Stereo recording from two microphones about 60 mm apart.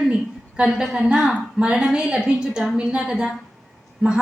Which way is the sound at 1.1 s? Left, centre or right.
Centre.